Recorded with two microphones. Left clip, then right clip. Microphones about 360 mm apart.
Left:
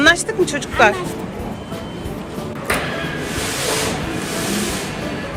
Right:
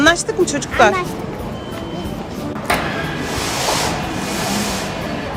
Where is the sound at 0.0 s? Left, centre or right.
Centre.